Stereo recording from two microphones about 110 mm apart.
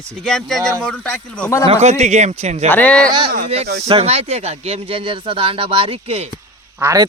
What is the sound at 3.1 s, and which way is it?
Speech, 45° right (ahead or behind).